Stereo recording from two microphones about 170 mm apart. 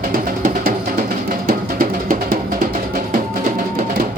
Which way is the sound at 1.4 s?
55° right (ahead or behind).